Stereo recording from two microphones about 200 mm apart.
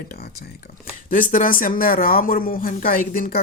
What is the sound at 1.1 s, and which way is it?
Speech, 40° left (ahead or behind).